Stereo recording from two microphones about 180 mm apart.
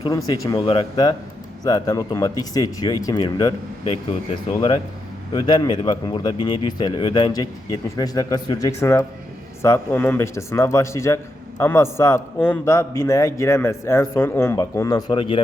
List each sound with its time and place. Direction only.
0.6 s a man's voice: 30° left (ahead or behind)